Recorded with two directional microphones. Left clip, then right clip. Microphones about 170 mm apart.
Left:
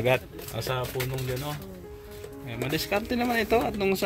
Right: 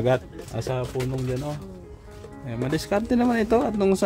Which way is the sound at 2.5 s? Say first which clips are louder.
Right 3 dB; 45° right (ahead or behind).